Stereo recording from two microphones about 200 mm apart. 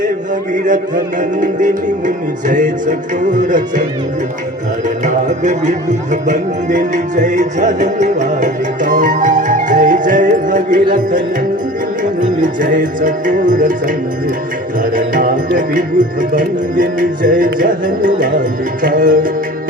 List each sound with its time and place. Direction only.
0.5 s speech: 40° right (ahead or behind)
5.0 s speech: 35° right (ahead or behind)
12.2 s speech: 40° right (ahead or behind)
14.9 s music: 45° right (ahead or behind)